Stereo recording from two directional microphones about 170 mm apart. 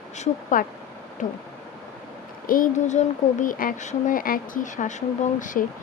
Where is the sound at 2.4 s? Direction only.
55° left (ahead or behind).